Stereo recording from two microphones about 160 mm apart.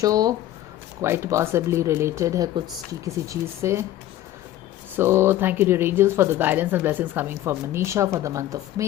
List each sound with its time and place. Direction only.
0.0 s speech: 20° right (ahead or behind)
4.9 s speech: 15° right (ahead or behind)